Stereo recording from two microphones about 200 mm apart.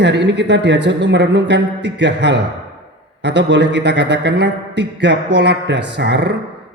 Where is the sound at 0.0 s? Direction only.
60° right (ahead or behind).